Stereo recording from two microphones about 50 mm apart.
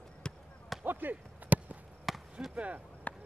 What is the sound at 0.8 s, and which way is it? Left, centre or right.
Basketball bounce, right.